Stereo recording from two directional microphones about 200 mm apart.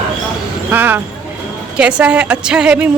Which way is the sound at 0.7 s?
10° right (ahead or behind).